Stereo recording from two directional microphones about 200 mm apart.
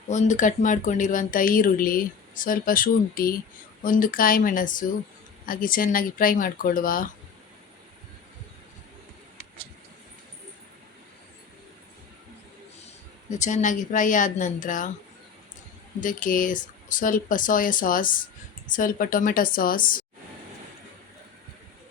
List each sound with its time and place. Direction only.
0.1 s speech: 35° left (ahead or behind)
13.3 s speech: 35° left (ahead or behind)
16.0 s speech: 40° left (ahead or behind)